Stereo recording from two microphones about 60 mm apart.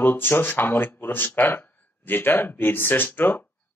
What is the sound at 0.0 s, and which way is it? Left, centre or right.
Speech, left.